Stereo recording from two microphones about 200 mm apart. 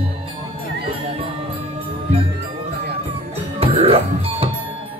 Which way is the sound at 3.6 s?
30° right (ahead or behind).